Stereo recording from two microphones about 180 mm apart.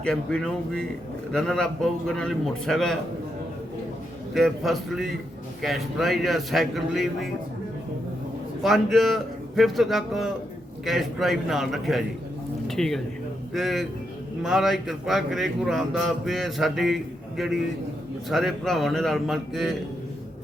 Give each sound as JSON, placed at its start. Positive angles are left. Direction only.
{"t": 0.0, "sound": "a man's voice", "side_deg": 5}
{"t": 4.4, "sound": "a man's voice", "side_deg": 0}
{"t": 8.6, "sound": "a man's voice", "side_deg": 0}